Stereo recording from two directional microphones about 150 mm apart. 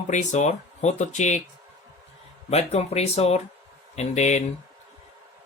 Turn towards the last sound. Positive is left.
turn(degrees=50)  # may be behind; listen again after turning